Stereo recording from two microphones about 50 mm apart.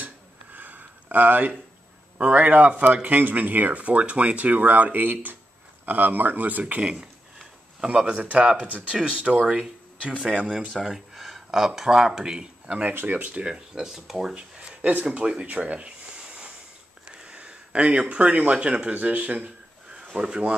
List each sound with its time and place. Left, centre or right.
0.0 s a sound: right
2.1 s speech: right
6.8 s speech: right
10.7 s speech: centre
12.6 s speech: right
13.0 s speech: right
13.3 s speech: centre
13.7 s speech: centre
14.6 s a sound: right
17.2 s speech: centre
18.9 s speech: right
20.2 s speech: centre